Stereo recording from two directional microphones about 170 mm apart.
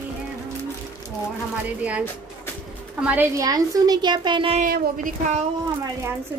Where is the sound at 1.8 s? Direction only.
10° right (ahead or behind).